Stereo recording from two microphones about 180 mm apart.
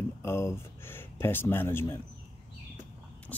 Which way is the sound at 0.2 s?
15° left (ahead or behind).